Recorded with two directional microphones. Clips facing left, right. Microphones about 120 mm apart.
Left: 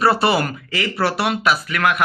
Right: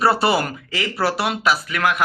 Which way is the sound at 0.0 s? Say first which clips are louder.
Left 1 dB; 20° right (ahead or behind).